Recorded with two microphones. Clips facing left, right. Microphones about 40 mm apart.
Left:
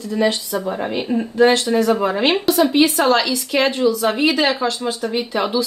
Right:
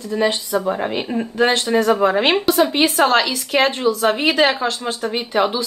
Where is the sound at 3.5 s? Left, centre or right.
Right.